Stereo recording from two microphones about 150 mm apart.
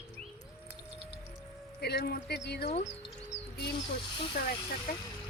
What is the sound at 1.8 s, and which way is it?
Speech, 90° left.